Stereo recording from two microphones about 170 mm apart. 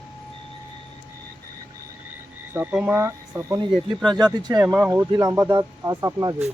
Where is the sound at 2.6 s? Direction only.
10° right (ahead or behind).